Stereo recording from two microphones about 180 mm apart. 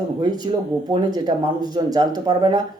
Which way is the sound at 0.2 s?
25° right (ahead or behind).